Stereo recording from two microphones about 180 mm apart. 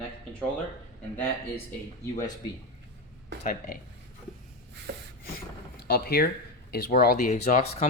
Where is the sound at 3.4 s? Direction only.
50° left (ahead or behind).